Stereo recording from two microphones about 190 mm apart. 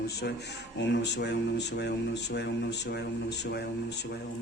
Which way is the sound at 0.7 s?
65° left (ahead or behind).